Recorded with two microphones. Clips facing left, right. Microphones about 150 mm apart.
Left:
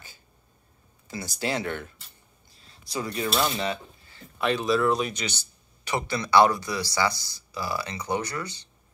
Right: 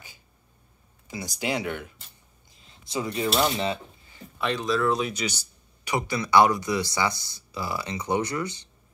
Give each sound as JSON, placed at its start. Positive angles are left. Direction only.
{"t": 1.0, "sound": "speech", "side_deg": -15}
{"t": 2.5, "sound": "a sound", "side_deg": -20}
{"t": 3.4, "sound": "cutlery", "side_deg": -25}
{"t": 4.4, "sound": "speech", "side_deg": 5}
{"t": 5.9, "sound": "speech", "side_deg": -15}